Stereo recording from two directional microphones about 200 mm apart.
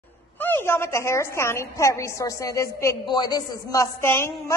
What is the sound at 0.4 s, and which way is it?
A woman's voice, 10° left (ahead or behind).